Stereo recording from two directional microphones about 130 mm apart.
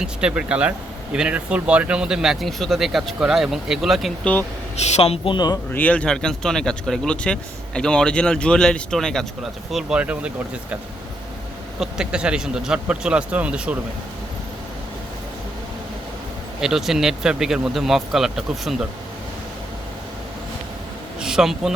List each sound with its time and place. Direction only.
0.0 s speech: 5° right (ahead or behind)
4.9 s speech: 50° left (ahead or behind)
5.7 s speech: 10° left (ahead or behind); by 10.8 s 10° right (ahead or behind)
11.8 s speech: 5° right (ahead or behind)
16.6 s speech: 5° right (ahead or behind)
21.2 s a man's voice: 5° right (ahead or behind)